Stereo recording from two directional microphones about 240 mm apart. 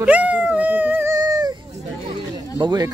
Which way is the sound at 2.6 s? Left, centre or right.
Centre.